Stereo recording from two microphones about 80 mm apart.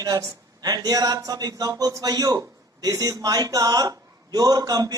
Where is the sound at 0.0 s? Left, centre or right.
Right.